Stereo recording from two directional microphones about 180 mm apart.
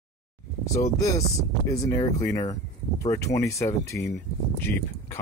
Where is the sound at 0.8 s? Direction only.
15° left (ahead or behind).